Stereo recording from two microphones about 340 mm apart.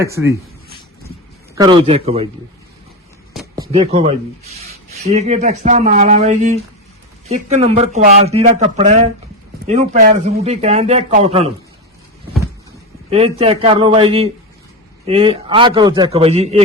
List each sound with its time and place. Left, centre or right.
0.0 s a man's voice: centre
1.5 s a man's voice: centre
3.3 s a man's voice: centre
13.1 s a man's voice: centre